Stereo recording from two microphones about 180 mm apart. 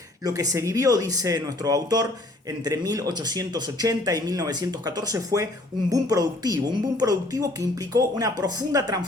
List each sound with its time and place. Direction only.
0.3 s a woman's voice: 20° right (ahead or behind)